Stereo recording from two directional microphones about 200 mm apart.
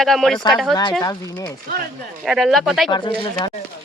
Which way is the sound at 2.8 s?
25° left (ahead or behind).